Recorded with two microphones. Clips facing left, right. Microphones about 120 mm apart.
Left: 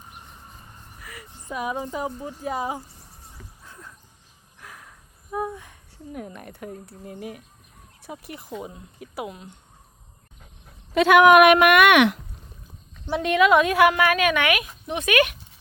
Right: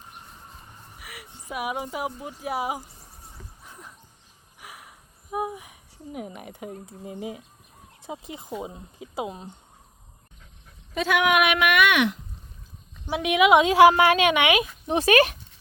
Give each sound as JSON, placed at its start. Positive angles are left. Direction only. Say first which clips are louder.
{"t": 0.9, "sound": "speech", "louder": "left 2 dB", "side_deg": -10}
{"t": 3.6, "sound": "music", "louder": "left 1 dB", "side_deg": -15}
{"t": 4.6, "sound": "a sound", "louder": "even", "side_deg": -10}
{"t": 8.0, "sound": "a woman's voice", "louder": "right 1 dB", "side_deg": -20}
{"t": 10.9, "sound": "speech", "louder": "left 8 dB", "side_deg": 70}
{"t": 11.2, "sound": "speech", "louder": "left 9 dB", "side_deg": 45}
{"t": 13.1, "sound": "a woman's voice", "louder": "even", "side_deg": -10}